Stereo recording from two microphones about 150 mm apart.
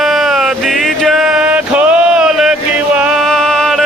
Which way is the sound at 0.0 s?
Centre (ahead or behind).